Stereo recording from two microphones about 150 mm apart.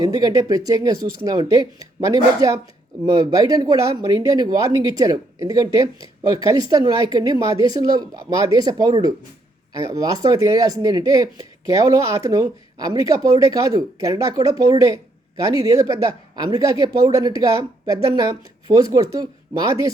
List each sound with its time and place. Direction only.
0.0 s a woman's voice: 25° right (ahead or behind)